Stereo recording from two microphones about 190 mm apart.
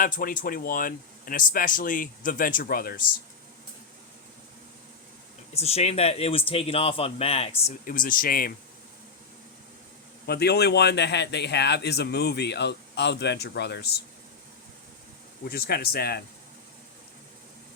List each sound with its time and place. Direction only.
0.0 s speech: 45° left (ahead or behind)
5.5 s speech: 35° left (ahead or behind)
7.9 s speech: 45° left (ahead or behind)
10.2 s a man's voice: 55° left (ahead or behind)
15.4 s speech: 55° left (ahead or behind)